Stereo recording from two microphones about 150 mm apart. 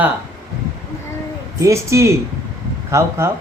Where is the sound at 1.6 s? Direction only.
20° right (ahead or behind).